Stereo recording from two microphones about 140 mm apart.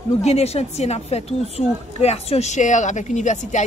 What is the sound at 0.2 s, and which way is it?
Speech, 50° left (ahead or behind).